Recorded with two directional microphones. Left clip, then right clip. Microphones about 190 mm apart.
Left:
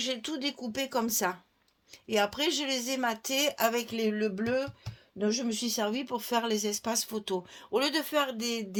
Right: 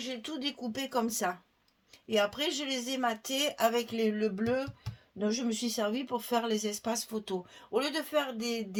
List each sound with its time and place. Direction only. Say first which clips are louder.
0.0 s speech: left 4 dB; 45° left (ahead or behind)